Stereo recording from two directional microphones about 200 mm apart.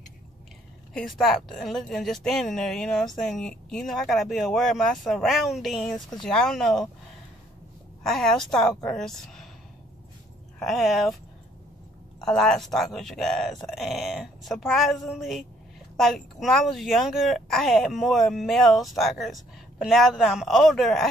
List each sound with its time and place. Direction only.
0.9 s speech: centre (ahead or behind)
8.0 s speech: centre (ahead or behind)
10.6 s speech: centre (ahead or behind)
12.2 s speech: 5° left (ahead or behind)